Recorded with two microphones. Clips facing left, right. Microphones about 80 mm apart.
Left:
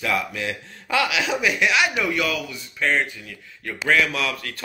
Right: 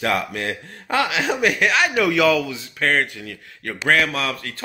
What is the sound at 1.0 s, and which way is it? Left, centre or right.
Speech, right.